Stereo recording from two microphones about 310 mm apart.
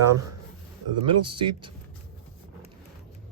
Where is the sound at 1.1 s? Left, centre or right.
Centre.